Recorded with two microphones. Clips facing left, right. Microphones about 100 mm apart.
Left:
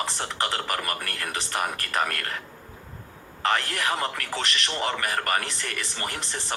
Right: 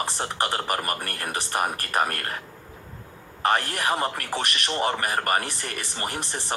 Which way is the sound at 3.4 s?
20° right (ahead or behind).